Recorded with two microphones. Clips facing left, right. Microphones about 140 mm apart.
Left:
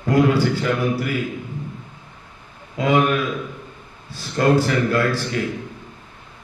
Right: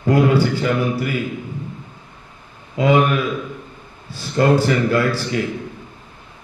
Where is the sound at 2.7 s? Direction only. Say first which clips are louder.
Right 3 dB; centre (ahead or behind).